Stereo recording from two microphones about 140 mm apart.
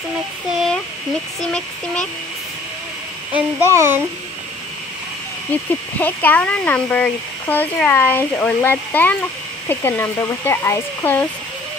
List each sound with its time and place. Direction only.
1.4 s speech: 5° left (ahead or behind)
3.3 s speech: 15° right (ahead or behind)
5.5 s speech: 10° left (ahead or behind)